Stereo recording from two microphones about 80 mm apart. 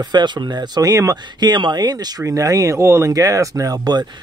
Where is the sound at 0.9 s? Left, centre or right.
Right.